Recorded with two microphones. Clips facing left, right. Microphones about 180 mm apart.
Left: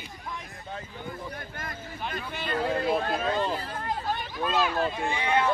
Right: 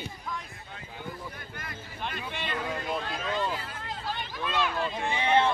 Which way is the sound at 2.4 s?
35° left (ahead or behind).